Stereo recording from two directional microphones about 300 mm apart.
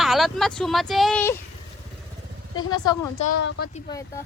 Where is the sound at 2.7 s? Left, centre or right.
Centre.